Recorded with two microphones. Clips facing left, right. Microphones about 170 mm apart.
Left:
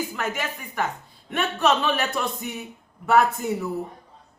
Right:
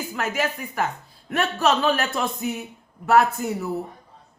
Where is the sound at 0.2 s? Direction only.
Centre (ahead or behind).